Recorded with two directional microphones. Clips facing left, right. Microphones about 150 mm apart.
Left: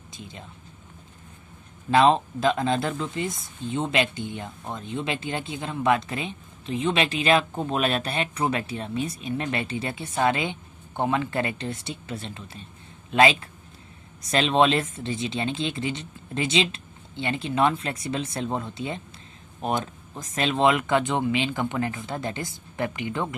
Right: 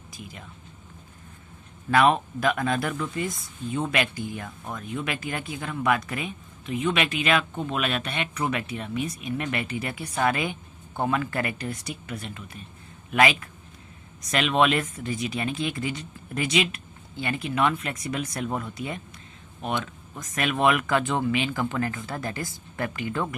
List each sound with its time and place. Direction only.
0.1 s speech: 25° left (ahead or behind)
1.9 s speech: 25° left (ahead or behind)
19.6 s speech: 35° left (ahead or behind); by 23.4 s 20° left (ahead or behind)